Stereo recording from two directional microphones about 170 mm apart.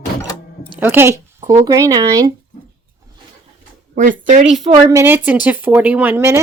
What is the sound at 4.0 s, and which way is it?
Speech, 50° right (ahead or behind).